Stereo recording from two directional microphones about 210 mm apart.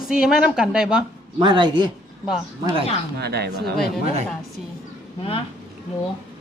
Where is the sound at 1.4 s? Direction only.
20° right (ahead or behind).